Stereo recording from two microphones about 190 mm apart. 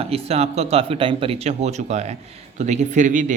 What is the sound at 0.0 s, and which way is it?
Speech, 30° right (ahead or behind).